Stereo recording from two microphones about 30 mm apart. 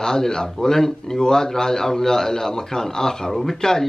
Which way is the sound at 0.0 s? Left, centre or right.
Centre.